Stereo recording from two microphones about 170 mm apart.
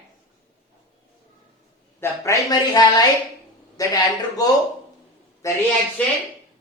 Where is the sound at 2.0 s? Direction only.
15° left (ahead or behind).